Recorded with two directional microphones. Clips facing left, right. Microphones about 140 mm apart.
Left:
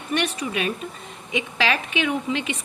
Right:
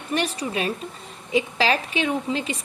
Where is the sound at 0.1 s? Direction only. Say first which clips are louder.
Even; 35° right (ahead or behind).